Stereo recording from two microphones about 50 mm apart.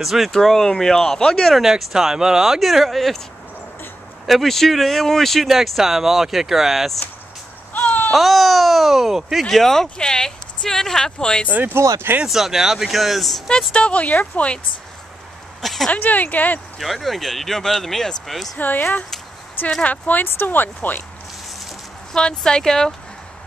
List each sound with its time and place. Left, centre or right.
0.0 s speech: centre
0.3 s speech: centre
1.5 s speech: centre
4.3 s speech: centre
8.1 s speech: centre
11.7 s speech: right
12.3 s speech: centre
13.5 s speech: centre
15.6 s speech: centre
15.9 s speech: left
16.7 s speech: centre
18.6 s speech: left
20.2 s speech: left
22.1 s speech: centre